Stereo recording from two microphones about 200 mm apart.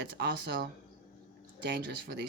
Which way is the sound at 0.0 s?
55° right (ahead or behind).